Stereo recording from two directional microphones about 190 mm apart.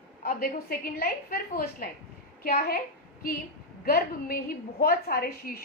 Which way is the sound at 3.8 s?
50° left (ahead or behind).